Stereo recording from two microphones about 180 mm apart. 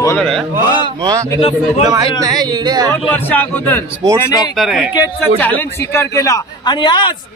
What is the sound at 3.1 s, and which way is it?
Speech, 10° left (ahead or behind).